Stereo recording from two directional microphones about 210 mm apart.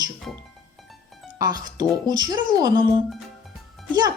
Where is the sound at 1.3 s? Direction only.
20° right (ahead or behind).